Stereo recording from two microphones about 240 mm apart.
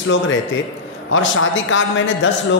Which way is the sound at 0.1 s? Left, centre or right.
Left.